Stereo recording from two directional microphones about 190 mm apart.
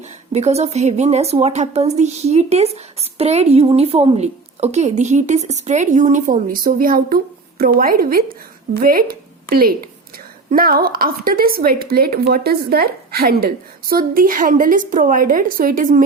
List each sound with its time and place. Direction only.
0.3 s a woman's voice: 35° right (ahead or behind)